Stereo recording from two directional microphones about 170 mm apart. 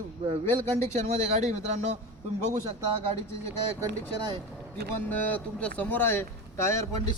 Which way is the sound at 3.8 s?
25° right (ahead or behind).